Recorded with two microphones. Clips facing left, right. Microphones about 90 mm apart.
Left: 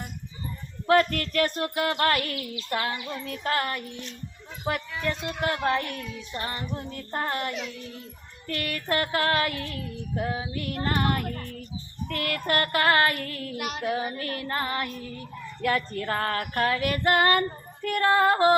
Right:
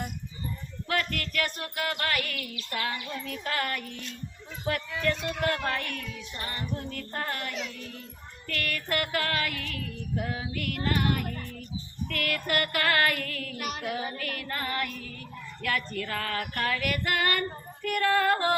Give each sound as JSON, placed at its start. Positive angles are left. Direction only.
{"t": 0.9, "sound": "child singing", "side_deg": 35}
{"t": 1.7, "sound": "female singing", "side_deg": 25}
{"t": 2.0, "sound": "child singing", "side_deg": 35}
{"t": 2.6, "sound": "female singing", "side_deg": 35}
{"t": 12.0, "sound": "child singing", "side_deg": 30}
{"t": 14.2, "sound": "female singing", "side_deg": 30}
{"t": 15.6, "sound": "child singing", "side_deg": 30}
{"t": 17.8, "sound": "female singing", "side_deg": 35}